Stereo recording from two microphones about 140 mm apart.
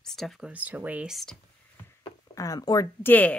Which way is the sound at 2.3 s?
25° left (ahead or behind).